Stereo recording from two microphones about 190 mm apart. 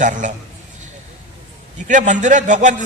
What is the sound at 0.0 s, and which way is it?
Speech, 40° right (ahead or behind).